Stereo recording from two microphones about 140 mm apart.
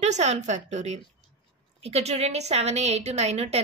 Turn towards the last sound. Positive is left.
turn(degrees=-45)  # may be behind; listen again after turning